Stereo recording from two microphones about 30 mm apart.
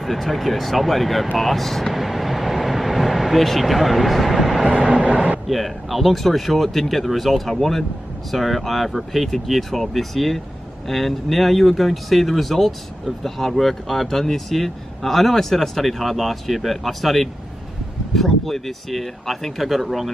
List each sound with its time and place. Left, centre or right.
0.0 s speech: centre
1.4 s vehicle: centre
3.6 s speech: centre
4.4 s train: centre
4.6 s train: right
5.5 s speech: centre